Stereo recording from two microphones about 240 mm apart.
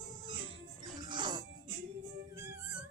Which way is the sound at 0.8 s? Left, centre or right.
Centre.